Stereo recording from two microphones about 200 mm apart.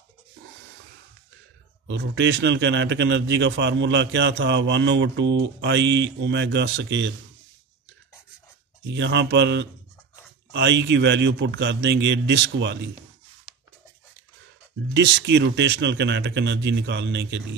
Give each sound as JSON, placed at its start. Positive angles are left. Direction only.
{"t": 1.9, "sound": "a man's voice", "side_deg": -60}
{"t": 8.9, "sound": "a man's voice", "side_deg": -60}
{"t": 15.2, "sound": "a man's voice", "side_deg": -60}